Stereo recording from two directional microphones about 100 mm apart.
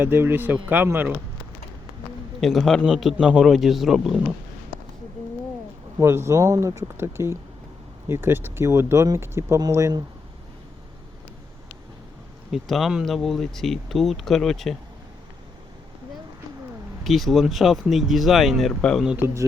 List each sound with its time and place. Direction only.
0.0 s speech: 20° right (ahead or behind)
2.4 s speech: centre (ahead or behind)
6.0 s speech: 25° right (ahead or behind)
12.5 s speech: centre (ahead or behind)
17.0 s speech: centre (ahead or behind)
18.8 s speech: 10° left (ahead or behind)
19.2 s speech: 30° right (ahead or behind)